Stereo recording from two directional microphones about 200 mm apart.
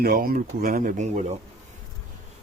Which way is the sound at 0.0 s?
50° right (ahead or behind).